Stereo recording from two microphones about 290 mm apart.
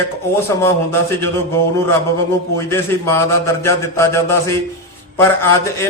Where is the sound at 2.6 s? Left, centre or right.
Centre.